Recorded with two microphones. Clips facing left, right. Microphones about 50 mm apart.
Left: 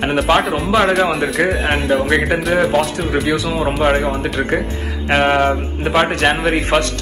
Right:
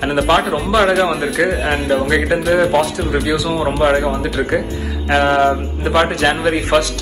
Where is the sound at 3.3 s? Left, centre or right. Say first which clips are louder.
Right 1 dB; left.